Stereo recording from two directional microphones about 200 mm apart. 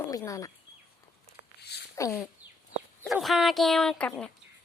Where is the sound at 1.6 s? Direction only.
55° left (ahead or behind).